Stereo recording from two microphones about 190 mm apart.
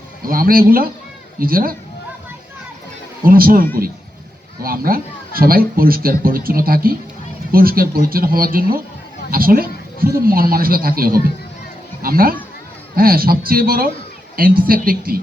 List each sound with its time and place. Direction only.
0.2 s a man's voice: 50° right (ahead or behind)
3.2 s a man's voice: 50° right (ahead or behind)